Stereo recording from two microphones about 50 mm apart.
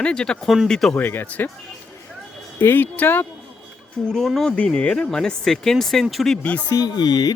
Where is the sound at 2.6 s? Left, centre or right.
Left.